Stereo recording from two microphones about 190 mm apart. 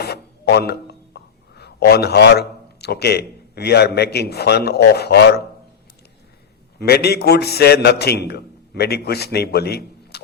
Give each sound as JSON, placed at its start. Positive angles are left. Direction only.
{"t": 0.0, "sound": "speech", "side_deg": 60}
{"t": 6.7, "sound": "a man's voice", "side_deg": 55}